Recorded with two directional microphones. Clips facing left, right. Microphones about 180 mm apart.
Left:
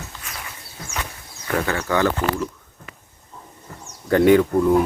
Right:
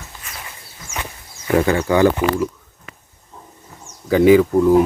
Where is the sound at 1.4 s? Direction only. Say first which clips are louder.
Right 7 dB; 15° right (ahead or behind).